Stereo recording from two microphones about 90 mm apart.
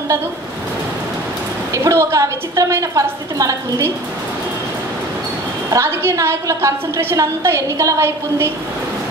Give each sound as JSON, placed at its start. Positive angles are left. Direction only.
{"t": 1.7, "sound": "a woman's voice", "side_deg": -30}
{"t": 5.7, "sound": "a woman's voice", "side_deg": -30}